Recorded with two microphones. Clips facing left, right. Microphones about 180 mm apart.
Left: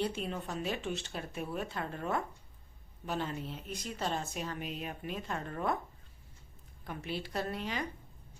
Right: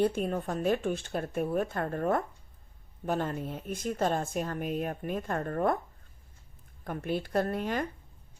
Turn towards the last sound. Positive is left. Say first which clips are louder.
# right 6 dB
turn(degrees=-50)  # may be behind; listen again after turning